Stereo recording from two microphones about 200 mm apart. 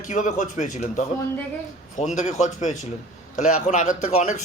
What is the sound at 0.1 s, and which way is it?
A man's voice, 40° left (ahead or behind).